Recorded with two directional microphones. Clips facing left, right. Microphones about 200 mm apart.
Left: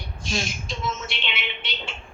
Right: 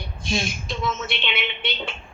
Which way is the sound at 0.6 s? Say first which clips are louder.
Right 3 dB; 60° right (ahead or behind).